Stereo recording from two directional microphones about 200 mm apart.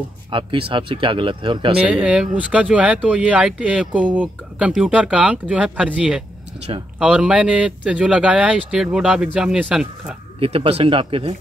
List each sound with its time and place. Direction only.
0.3 s speech: 25° right (ahead or behind)
1.8 s speech: 5° right (ahead or behind)
10.4 s speech: 30° right (ahead or behind)